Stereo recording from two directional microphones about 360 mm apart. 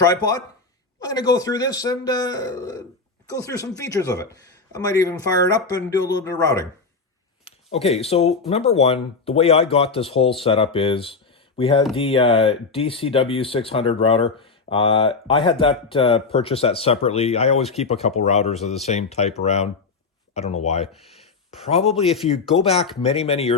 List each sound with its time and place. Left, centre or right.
0.0 s speech: centre
21.7 s speech: centre
22.6 s speech: centre